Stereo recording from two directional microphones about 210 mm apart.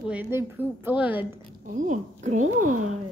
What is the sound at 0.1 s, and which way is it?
A child's voice, 10° right (ahead or behind).